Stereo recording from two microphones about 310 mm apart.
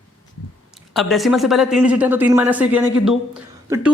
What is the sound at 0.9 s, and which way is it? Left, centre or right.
Speech, centre.